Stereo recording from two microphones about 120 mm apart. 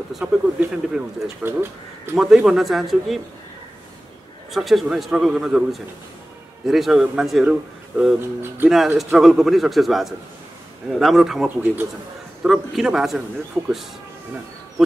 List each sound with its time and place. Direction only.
0.2 s speech: 15° right (ahead or behind)
2.1 s a man's voice: 5° right (ahead or behind)
4.5 s a man's voice: centre (ahead or behind)
12.4 s a man's voice: 5° right (ahead or behind)